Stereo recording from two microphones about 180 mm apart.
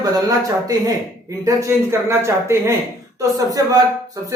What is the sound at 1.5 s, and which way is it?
A man's voice, 15° right (ahead or behind).